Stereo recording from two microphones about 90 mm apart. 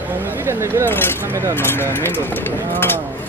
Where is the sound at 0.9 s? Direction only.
25° left (ahead or behind).